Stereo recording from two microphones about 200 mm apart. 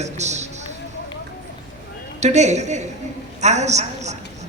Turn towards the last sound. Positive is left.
turn(degrees=-35)  # may be behind; listen again after turning